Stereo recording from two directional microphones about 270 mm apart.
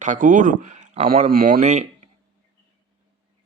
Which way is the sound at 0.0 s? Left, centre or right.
Right.